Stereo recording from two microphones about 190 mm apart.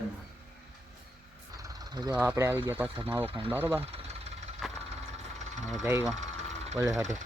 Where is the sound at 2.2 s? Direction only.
10° right (ahead or behind).